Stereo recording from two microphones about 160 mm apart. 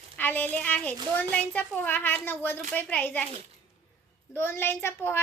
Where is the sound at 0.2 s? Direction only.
10° left (ahead or behind).